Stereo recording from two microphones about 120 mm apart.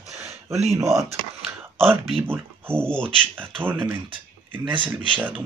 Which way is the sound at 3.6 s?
15° right (ahead or behind).